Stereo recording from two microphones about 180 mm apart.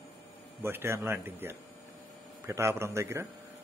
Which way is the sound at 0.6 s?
15° right (ahead or behind).